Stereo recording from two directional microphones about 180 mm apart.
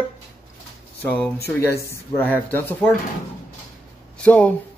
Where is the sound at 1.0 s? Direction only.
10° left (ahead or behind).